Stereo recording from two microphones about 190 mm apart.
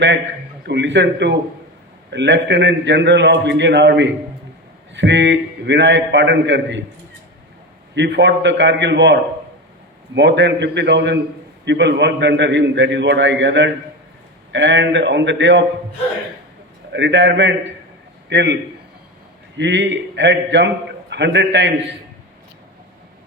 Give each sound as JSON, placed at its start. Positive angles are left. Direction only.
{"t": 0.7, "sound": "a man's voice", "side_deg": -70}
{"t": 16.9, "sound": "a man's voice", "side_deg": -70}
{"t": 19.5, "sound": "a man's voice", "side_deg": -70}